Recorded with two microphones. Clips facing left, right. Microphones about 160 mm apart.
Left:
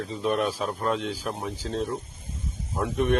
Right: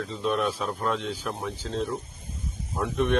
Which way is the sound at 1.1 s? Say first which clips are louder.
Left 1 dB; 35° left (ahead or behind).